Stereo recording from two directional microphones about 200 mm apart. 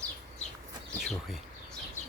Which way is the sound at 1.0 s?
Centre (ahead or behind).